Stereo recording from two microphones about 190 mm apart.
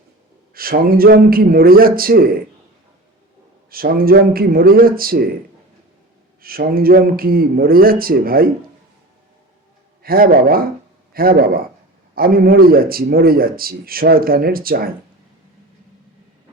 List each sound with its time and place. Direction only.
0.5 s speech: 50° right (ahead or behind)
3.7 s speech: 50° right (ahead or behind)
6.4 s speech: 50° right (ahead or behind)
10.0 s speech: 50° right (ahead or behind)